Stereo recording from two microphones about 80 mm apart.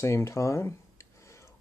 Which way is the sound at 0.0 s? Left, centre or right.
Left.